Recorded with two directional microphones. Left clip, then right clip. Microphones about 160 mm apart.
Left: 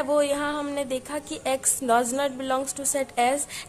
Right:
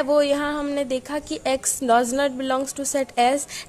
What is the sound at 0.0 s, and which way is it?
A woman's voice, 30° right (ahead or behind).